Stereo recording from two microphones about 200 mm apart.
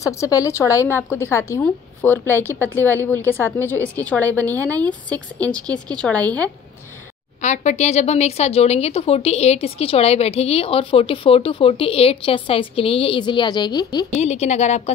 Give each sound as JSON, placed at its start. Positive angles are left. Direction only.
{"t": 0.0, "sound": "a woman's voice", "side_deg": 15}
{"t": 7.4, "sound": "a woman's voice", "side_deg": 35}
{"t": 14.2, "sound": "a woman's voice", "side_deg": 35}